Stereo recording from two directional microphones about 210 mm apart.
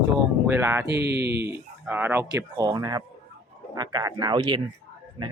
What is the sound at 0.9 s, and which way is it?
Speech, 50° right (ahead or behind).